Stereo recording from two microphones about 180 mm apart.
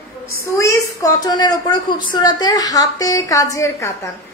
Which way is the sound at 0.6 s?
20° left (ahead or behind).